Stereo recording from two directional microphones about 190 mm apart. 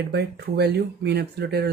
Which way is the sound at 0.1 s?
60° right (ahead or behind).